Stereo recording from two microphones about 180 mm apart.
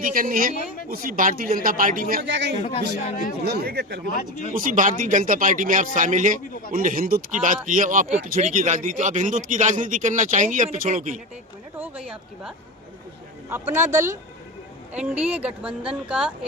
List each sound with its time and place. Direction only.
0.0 s speech: 50° right (ahead or behind)
2.2 s a man's voice: 75° right (ahead or behind)
2.5 s speech: 35° left (ahead or behind)
3.4 s speech: 60° right (ahead or behind)
4.1 s speech: 45° left (ahead or behind)
4.5 s speech: 50° right (ahead or behind)
11.8 s speech: 5° right (ahead or behind)